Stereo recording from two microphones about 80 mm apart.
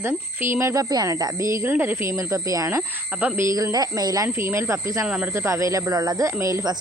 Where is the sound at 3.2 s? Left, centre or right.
Right.